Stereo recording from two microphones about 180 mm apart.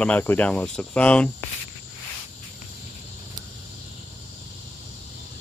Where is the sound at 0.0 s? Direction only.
10° left (ahead or behind).